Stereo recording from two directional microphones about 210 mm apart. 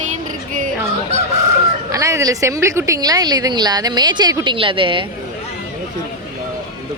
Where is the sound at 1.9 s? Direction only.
15° right (ahead or behind).